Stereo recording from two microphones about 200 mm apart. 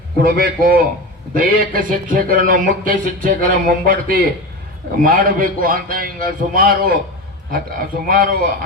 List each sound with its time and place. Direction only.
0.2 s speech: 50° right (ahead or behind)